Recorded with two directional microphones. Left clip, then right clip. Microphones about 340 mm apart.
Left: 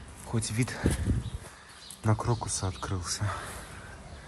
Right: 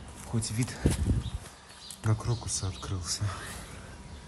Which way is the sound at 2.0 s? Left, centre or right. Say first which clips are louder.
Left 5 dB; centre.